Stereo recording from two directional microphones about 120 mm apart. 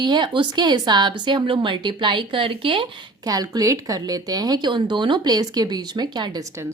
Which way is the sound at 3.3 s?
30° right (ahead or behind).